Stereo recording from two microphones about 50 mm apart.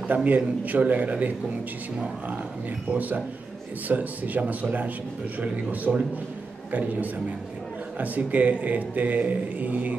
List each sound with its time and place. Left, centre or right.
0.1 s speech: right
5.9 s a man's voice: centre
6.7 s speech: right